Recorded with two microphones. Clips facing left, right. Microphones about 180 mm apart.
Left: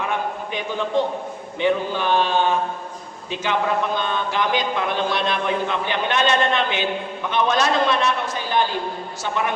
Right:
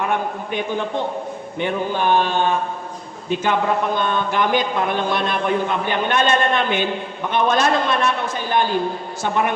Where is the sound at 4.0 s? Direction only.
50° right (ahead or behind).